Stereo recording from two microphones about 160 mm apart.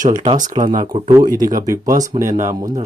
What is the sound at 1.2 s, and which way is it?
Speech, 25° right (ahead or behind).